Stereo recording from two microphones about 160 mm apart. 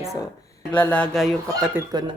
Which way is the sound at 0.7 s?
10° left (ahead or behind).